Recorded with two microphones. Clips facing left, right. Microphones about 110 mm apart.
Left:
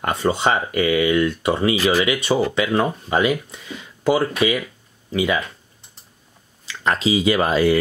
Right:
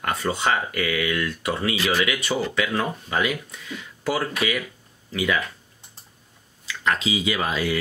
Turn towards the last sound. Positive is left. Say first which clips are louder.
# left 8 dB
turn(degrees=45)  # may be behind; listen again after turning